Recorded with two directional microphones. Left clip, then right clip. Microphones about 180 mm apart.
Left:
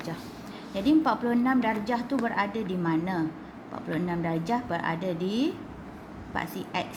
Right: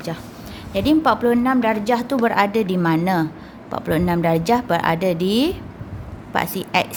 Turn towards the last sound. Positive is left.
turn(degrees=-45)  # may be behind; listen again after turning